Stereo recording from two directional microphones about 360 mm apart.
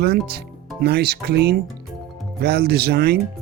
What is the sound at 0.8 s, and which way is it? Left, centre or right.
Speech, right.